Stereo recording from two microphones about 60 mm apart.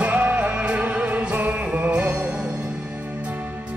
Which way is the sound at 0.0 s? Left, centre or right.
Right.